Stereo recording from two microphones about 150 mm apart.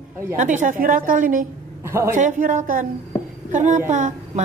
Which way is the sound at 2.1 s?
60° right (ahead or behind).